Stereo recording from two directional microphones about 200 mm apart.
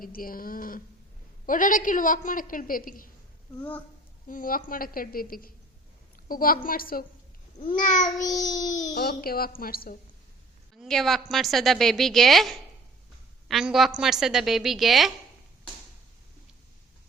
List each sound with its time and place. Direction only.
0.0 s a woman's voice: 45° left (ahead or behind)
3.6 s child singing: 10° left (ahead or behind)
4.3 s a woman's voice: 45° left (ahead or behind)
7.8 s child singing: 40° left (ahead or behind)
8.2 s child singing: 15° left (ahead or behind)
8.8 s a woman's voice: 50° left (ahead or behind)
10.8 s a woman's voice: centre (ahead or behind)